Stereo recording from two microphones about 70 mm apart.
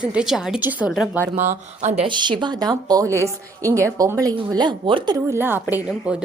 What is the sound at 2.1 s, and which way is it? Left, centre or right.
Speech, right.